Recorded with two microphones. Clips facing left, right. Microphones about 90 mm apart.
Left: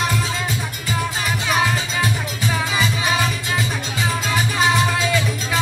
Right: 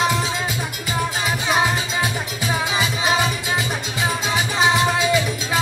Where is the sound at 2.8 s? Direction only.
10° right (ahead or behind).